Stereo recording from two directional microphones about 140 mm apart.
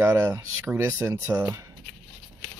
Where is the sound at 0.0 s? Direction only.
20° right (ahead or behind).